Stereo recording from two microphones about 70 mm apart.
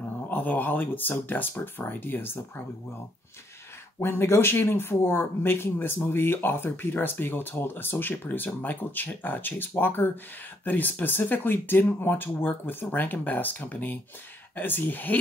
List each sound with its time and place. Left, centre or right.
0.3 s speech: left
4.0 s speech: left